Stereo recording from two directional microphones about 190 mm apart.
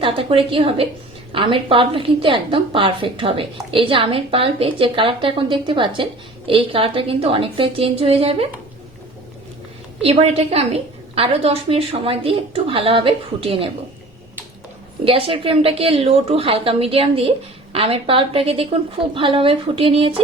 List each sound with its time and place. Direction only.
0.0 s a woman's voice: 30° right (ahead or behind)
10.0 s a woman's voice: 30° right (ahead or behind)
15.0 s a woman's voice: 30° right (ahead or behind)